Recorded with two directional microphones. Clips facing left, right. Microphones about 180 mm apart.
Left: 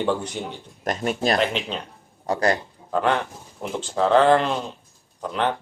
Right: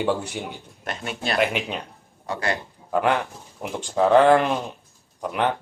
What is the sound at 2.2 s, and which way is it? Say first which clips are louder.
Speech: left 5 dB; 40° left (ahead or behind).